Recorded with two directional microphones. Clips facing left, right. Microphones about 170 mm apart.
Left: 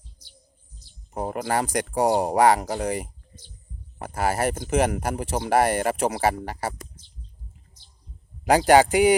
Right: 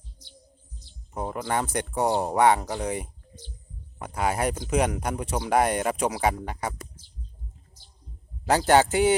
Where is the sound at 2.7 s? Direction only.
60° left (ahead or behind).